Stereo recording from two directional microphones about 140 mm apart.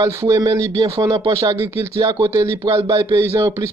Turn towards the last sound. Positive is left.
turn(degrees=-20)  # may be behind; listen again after turning